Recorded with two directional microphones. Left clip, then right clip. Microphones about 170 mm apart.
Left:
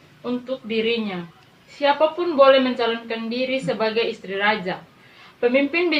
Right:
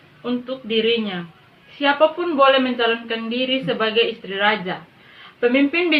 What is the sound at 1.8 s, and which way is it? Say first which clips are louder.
A woman's voice: right 2 dB; 30° right (ahead or behind).